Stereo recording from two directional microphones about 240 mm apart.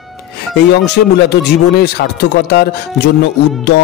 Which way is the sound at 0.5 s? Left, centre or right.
Left.